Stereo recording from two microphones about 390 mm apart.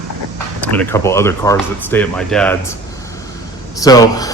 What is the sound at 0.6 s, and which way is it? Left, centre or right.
Speech, centre.